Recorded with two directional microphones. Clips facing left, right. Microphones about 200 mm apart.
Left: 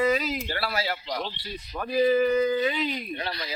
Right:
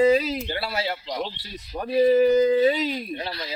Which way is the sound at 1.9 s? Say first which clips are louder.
Right 4 dB; 35° right (ahead or behind).